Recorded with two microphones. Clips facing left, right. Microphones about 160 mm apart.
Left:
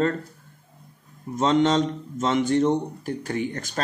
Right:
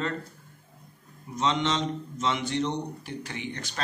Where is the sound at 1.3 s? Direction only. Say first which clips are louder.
Left 7 dB; 45° left (ahead or behind).